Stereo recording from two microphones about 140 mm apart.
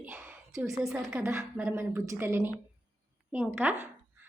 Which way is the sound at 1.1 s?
20° right (ahead or behind).